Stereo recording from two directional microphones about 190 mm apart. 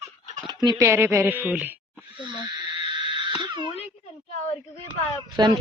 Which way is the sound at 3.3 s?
25° right (ahead or behind).